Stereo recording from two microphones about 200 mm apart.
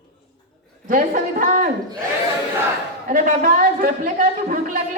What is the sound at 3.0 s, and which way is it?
A woman's voice, 40° right (ahead or behind).